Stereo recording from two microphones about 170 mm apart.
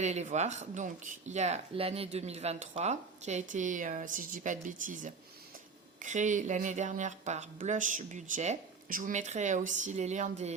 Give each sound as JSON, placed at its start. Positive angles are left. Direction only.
{"t": 0.0, "sound": "speech", "side_deg": -40}